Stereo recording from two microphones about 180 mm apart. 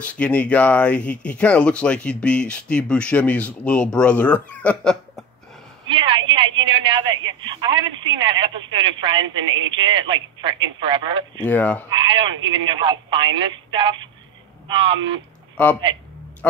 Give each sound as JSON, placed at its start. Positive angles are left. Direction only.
{"t": 0.0, "sound": "speech", "side_deg": 5}
{"t": 5.9, "sound": "a woman's voice", "side_deg": -25}
{"t": 11.4, "sound": "speech", "side_deg": 10}
{"t": 11.9, "sound": "a woman's voice", "side_deg": -25}
{"t": 15.5, "sound": "a man's voice", "side_deg": 10}